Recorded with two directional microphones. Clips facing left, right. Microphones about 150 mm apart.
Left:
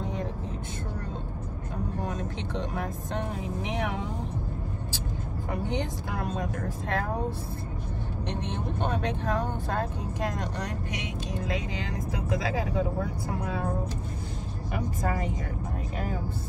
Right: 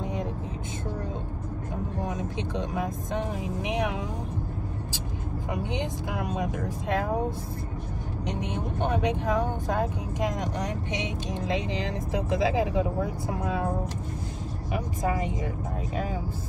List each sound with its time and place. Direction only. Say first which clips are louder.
0.0 s vehicle: right 1 dB; 15° right (ahead or behind)
2.0 s speech: right 2 dB; 15° right (ahead or behind)
5.5 s speech: even; 15° right (ahead or behind)
14.7 s speech: right 2 dB; 15° right (ahead or behind)